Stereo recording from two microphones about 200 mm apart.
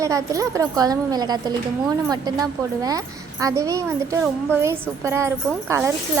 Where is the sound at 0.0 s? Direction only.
15° right (ahead or behind).